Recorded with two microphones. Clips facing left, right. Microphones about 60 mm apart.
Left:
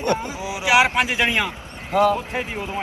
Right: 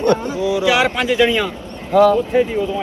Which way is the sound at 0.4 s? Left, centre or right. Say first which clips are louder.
Right 2 dB; centre.